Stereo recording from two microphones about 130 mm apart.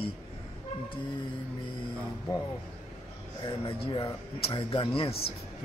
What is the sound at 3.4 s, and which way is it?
A man's voice, 40° left (ahead or behind).